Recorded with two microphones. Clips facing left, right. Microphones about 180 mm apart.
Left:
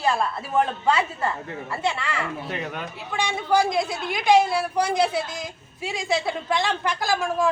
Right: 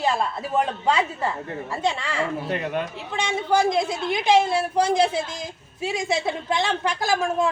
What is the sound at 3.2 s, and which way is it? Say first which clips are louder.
Speech: even; 20° right (ahead or behind).